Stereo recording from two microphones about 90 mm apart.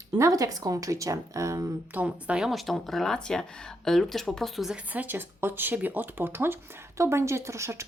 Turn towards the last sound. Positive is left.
turn(degrees=-30)  # may be behind; listen again after turning